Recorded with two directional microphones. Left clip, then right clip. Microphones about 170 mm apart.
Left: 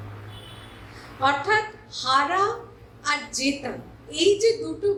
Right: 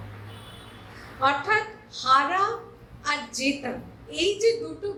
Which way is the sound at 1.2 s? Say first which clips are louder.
Left 1 dB; 35° left (ahead or behind).